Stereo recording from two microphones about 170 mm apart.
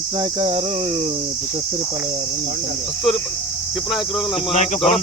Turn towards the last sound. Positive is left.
turn(degrees=35)  # may be behind; listen again after turning